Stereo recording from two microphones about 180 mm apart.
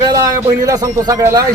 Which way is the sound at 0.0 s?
20° right (ahead or behind).